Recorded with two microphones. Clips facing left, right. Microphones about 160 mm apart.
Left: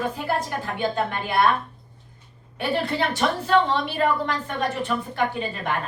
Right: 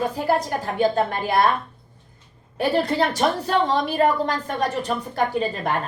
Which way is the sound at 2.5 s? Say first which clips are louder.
Right 4 dB; 40° right (ahead or behind).